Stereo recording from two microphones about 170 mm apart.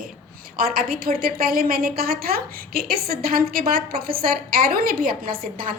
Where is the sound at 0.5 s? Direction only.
60° right (ahead or behind).